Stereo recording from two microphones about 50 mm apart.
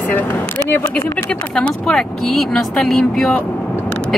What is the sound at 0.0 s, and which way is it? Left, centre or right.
Speech, left.